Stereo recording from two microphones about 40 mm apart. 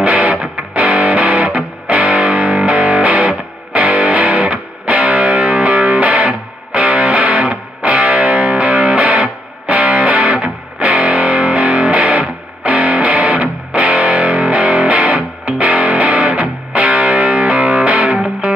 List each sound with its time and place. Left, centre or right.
0.0 s music: right